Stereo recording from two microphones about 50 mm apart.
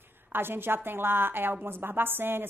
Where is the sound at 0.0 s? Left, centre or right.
Right.